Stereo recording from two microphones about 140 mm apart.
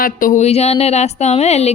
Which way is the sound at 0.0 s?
75° left (ahead or behind).